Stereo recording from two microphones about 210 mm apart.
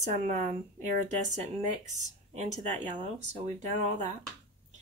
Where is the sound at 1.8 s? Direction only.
35° right (ahead or behind).